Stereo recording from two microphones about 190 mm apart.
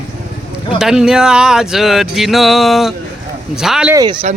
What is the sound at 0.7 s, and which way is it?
Speech, 5° right (ahead or behind).